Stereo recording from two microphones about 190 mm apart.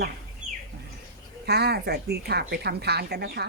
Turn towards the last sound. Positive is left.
turn(degrees=-60)  # may be behind; listen again after turning